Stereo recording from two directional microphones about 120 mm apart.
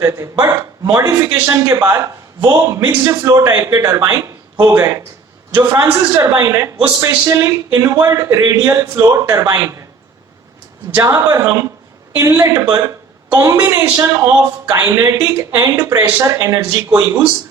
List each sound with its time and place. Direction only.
0.0 s speech: 25° right (ahead or behind)
10.9 s speech: 25° right (ahead or behind)